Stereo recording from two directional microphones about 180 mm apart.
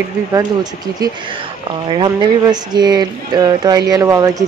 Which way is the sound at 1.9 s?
25° right (ahead or behind).